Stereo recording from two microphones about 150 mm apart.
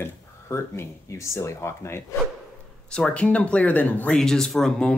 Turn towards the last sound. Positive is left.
turn(degrees=5)  # may be behind; listen again after turning